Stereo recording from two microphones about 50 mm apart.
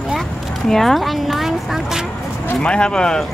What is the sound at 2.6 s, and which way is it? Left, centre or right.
Speech, centre.